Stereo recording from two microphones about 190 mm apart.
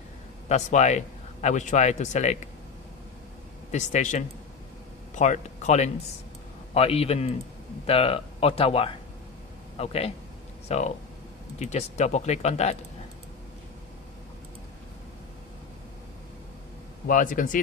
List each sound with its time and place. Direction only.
0.5 s speech: 40° left (ahead or behind)
3.7 s speech: 40° left (ahead or behind)
17.1 s speech: 45° left (ahead or behind)